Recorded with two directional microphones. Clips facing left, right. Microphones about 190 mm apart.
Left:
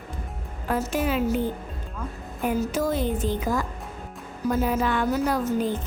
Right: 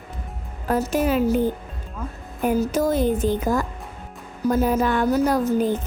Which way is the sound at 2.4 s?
40° right (ahead or behind).